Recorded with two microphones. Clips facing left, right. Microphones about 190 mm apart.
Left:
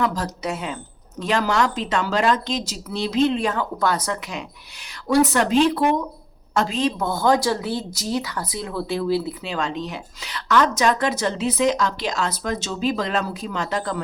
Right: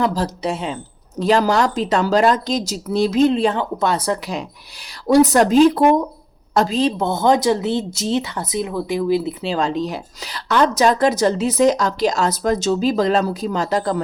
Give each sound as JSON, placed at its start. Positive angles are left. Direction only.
{"t": 0.0, "sound": "speech", "side_deg": -35}
{"t": 9.4, "sound": "speech", "side_deg": -35}